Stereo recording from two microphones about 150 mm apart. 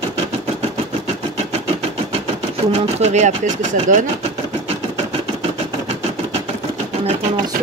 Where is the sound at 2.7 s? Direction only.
50° right (ahead or behind).